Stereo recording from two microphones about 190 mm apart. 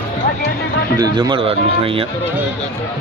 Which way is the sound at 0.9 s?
20° right (ahead or behind).